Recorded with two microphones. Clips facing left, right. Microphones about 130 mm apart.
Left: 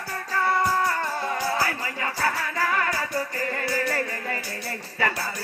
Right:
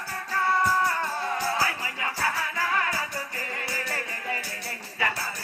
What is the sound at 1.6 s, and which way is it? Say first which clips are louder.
Music: left 2 dB; 45° left (ahead or behind).